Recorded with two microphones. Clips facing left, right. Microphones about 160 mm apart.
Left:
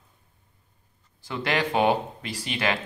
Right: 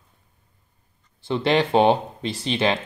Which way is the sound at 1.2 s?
25° right (ahead or behind).